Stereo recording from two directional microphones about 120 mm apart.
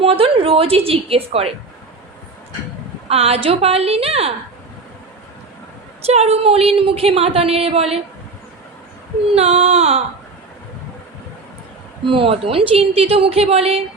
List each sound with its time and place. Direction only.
0.0 s a woman's voice: 50° right (ahead or behind)
3.1 s a woman's voice: 55° right (ahead or behind)
6.1 s a woman's voice: 60° right (ahead or behind)
9.3 s a woman's voice: 55° right (ahead or behind)
12.0 s a woman's voice: 50° right (ahead or behind)